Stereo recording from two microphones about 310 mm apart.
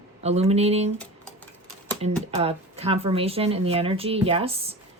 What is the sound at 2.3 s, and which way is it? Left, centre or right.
Speech, centre.